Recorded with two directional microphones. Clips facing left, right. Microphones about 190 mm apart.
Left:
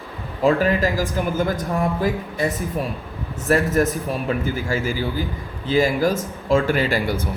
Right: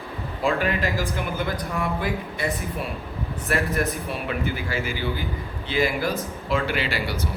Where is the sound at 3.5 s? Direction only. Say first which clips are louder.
Left 7 dB; 40° left (ahead or behind).